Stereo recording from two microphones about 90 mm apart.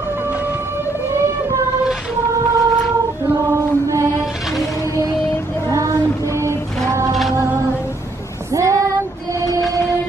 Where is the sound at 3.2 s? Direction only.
35° right (ahead or behind).